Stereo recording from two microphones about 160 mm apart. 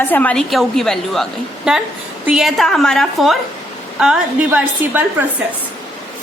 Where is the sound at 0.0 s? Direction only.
10° left (ahead or behind); by 5.0 s 10° right (ahead or behind).